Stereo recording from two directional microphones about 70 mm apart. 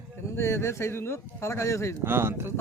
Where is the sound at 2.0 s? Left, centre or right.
Right.